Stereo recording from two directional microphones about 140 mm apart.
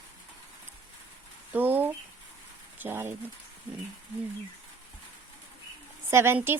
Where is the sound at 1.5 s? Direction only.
15° right (ahead or behind).